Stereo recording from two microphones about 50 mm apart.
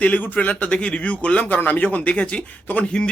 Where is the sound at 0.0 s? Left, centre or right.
Left.